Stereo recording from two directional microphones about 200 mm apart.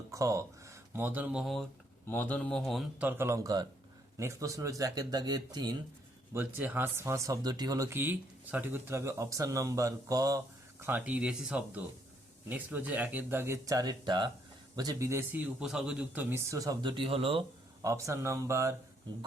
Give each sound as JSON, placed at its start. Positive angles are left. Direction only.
{"t": 0.1, "sound": "speech", "side_deg": -15}
{"t": 2.0, "sound": "speech", "side_deg": 10}
{"t": 17.8, "sound": "speech", "side_deg": -15}